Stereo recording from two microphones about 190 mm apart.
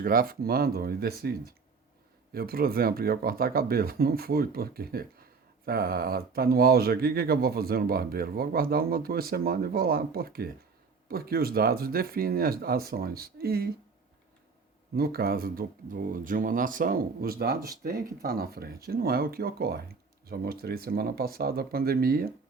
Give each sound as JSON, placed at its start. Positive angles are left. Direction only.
{"t": 0.0, "sound": "speech", "side_deg": -50}
{"t": 14.9, "sound": "speech", "side_deg": -55}